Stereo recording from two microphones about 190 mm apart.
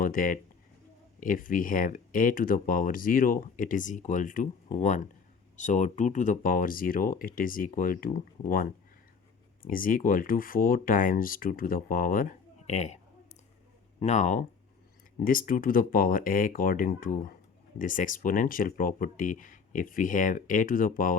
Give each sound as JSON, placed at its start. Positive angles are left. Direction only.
{"t": 0.0, "sound": "speech", "side_deg": 45}
{"t": 9.6, "sound": "speech", "side_deg": 45}
{"t": 14.0, "sound": "speech", "side_deg": 35}